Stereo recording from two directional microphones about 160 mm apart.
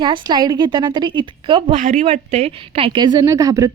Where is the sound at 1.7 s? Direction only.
50° right (ahead or behind).